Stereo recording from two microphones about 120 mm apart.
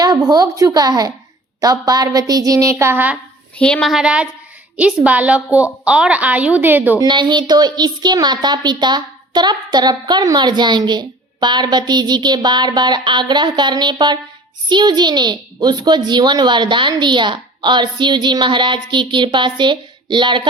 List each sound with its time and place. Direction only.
0.0 s a woman's voice: 35° right (ahead or behind); by 3.2 s 15° right (ahead or behind)
3.6 s a woman's voice: 5° left (ahead or behind)
3.9 s a woman's voice: 10° right (ahead or behind)
7.0 s a woman's voice: 40° right (ahead or behind)